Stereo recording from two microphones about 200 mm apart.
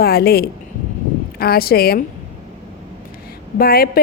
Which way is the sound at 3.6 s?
50° left (ahead or behind).